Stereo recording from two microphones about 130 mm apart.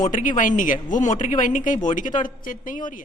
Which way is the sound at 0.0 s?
85° left.